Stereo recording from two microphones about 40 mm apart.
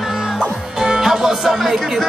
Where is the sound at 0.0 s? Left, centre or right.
Centre.